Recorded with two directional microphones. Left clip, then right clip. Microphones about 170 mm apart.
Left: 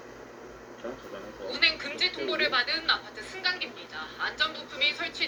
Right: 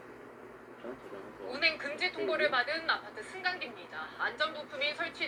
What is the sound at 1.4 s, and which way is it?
A woman's voice, 15° left (ahead or behind).